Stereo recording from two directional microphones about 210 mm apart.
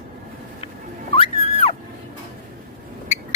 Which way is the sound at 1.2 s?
25° left (ahead or behind).